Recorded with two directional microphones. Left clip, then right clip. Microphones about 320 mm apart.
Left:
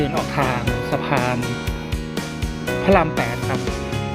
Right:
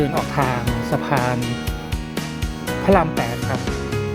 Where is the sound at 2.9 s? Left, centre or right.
Centre.